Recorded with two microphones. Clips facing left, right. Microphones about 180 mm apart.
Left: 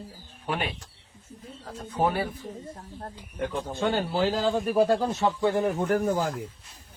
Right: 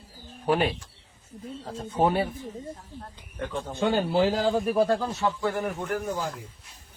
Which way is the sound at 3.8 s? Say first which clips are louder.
Right 3 dB; 15° right (ahead or behind).